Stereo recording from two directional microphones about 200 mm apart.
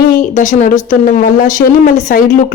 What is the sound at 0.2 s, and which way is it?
A woman's voice, 40° left (ahead or behind).